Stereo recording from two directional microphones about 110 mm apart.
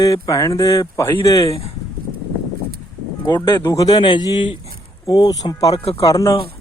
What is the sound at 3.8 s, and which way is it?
A man's voice, 40° left (ahead or behind).